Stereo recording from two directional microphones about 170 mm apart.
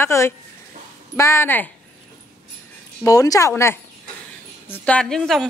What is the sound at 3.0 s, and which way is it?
A woman's voice, 20° left (ahead or behind).